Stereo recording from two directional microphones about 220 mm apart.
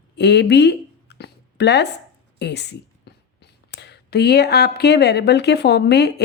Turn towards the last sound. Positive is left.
turn(degrees=50)  # may be behind; listen again after turning